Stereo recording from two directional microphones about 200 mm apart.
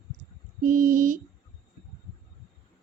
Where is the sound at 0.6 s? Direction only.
40° right (ahead or behind).